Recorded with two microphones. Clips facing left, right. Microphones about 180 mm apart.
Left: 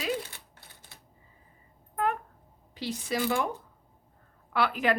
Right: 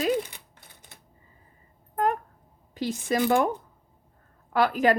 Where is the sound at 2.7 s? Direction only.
45° right (ahead or behind).